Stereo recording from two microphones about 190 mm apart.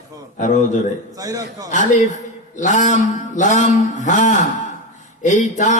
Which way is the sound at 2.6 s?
40° left (ahead or behind).